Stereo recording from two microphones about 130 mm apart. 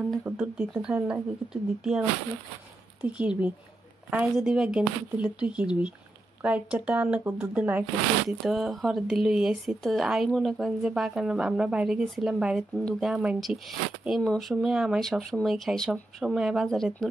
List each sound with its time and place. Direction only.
0.3 s speech: 20° right (ahead or behind)
0.6 s speech: 5° right (ahead or behind)